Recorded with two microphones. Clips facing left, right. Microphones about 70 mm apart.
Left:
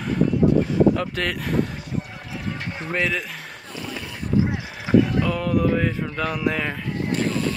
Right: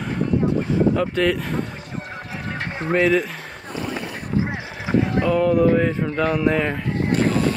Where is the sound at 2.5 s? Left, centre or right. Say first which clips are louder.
Right 5 dB; right.